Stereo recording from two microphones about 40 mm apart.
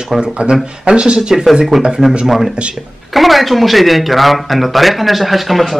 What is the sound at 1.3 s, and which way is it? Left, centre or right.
Speech, centre.